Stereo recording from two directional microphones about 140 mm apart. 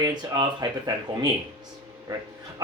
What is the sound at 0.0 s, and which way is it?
Speech, 30° right (ahead or behind).